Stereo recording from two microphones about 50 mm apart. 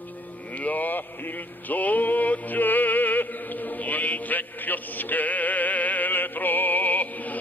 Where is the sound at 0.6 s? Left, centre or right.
Left.